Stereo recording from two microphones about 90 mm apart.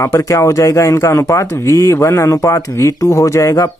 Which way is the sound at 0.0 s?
35° left (ahead or behind).